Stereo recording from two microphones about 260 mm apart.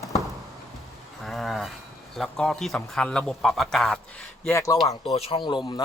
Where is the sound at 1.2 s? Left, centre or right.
Centre.